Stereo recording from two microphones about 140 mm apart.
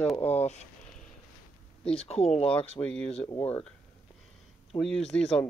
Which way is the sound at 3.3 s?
40° left (ahead or behind).